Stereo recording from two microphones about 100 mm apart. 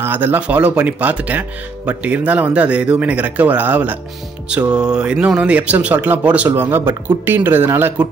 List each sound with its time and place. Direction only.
0.0 s a man's voice: 20° right (ahead or behind)